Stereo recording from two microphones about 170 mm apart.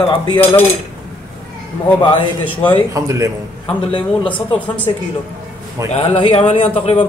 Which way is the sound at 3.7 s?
30° left (ahead or behind).